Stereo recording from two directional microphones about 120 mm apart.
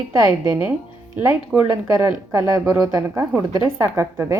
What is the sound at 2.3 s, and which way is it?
A woman's voice, 25° right (ahead or behind).